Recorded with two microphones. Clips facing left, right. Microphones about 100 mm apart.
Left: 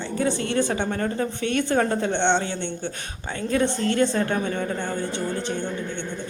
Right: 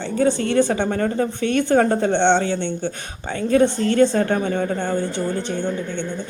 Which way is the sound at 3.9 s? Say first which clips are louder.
Right 7 dB; 40° right (ahead or behind).